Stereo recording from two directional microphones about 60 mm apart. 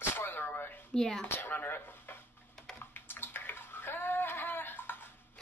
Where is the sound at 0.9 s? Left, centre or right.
Centre.